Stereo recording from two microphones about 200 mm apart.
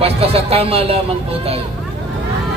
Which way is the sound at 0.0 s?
30° right (ahead or behind).